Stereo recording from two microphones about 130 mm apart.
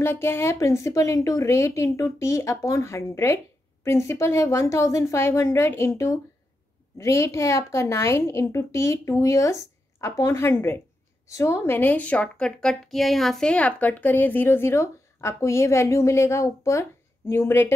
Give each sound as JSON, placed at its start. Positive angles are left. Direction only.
{"t": 0.0, "sound": "a woman's voice", "side_deg": 20}